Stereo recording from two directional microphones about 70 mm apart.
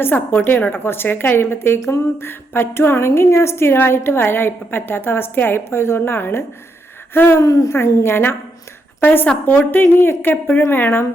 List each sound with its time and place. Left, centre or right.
0.0 s a woman's voice: left
7.4 s speech: left
7.7 s a woman's voice: left